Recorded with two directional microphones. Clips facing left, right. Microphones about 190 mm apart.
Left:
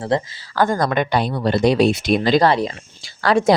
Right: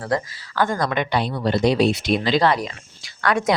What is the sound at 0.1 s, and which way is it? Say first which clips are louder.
Speech: left 3 dB; 25° left (ahead or behind).